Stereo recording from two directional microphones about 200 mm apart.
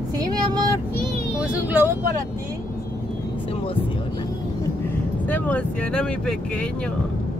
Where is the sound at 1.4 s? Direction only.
10° right (ahead or behind).